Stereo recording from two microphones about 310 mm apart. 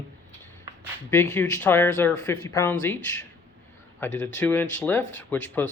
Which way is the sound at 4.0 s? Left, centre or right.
Centre.